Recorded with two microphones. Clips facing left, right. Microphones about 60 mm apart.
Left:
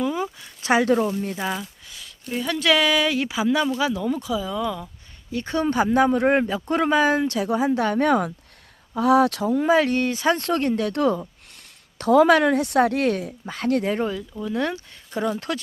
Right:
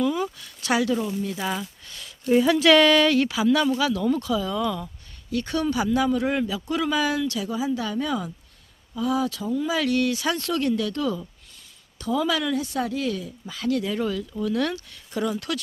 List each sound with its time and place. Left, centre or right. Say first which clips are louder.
0.0 s a sound: right 1 dB; left
1.5 s speech: left 1 dB; centre; by 3.7 s left
3.9 s speech: right 1 dB; centre
5.3 s speech: left 1 dB; left
5.7 s a man's voice: left 5 dB; left
9.7 s speech: left 3 dB; left
11.9 s a man's voice: left 9 dB; left
14.0 s speech: even; left